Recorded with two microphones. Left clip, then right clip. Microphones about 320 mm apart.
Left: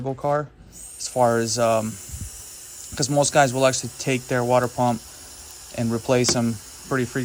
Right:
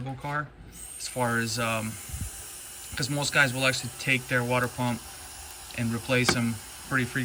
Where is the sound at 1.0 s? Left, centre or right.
Centre.